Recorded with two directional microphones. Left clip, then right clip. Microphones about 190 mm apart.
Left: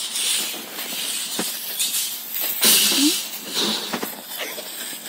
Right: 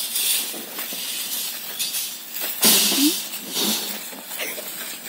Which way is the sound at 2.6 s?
50° right (ahead or behind).